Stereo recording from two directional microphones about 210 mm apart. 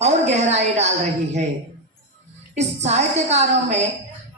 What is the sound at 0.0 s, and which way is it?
A woman's voice, 30° right (ahead or behind).